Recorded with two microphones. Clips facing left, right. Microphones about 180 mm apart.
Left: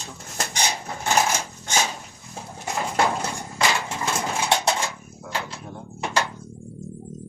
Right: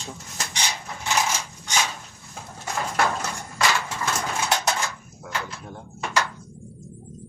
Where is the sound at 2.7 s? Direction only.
20° left (ahead or behind).